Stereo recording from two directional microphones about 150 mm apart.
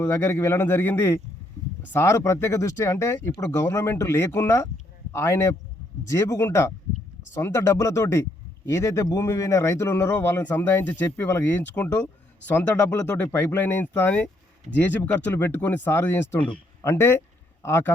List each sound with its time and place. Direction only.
0.0 s a man's voice: 15° left (ahead or behind)